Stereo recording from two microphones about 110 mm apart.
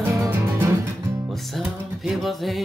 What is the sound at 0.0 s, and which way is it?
Music, 25° right (ahead or behind).